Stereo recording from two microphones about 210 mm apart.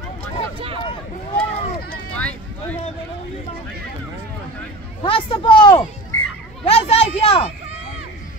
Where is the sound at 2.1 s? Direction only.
5° left (ahead or behind).